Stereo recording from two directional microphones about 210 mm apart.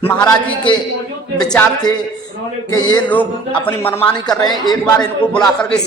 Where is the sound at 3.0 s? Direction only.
10° left (ahead or behind).